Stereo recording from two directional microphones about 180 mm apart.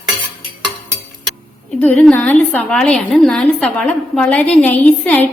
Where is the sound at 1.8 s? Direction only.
5° left (ahead or behind).